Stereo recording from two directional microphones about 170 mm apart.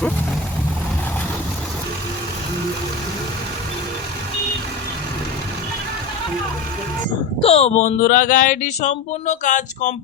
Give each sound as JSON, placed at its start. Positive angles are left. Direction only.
{"t": 7.4, "sound": "speech", "side_deg": 40}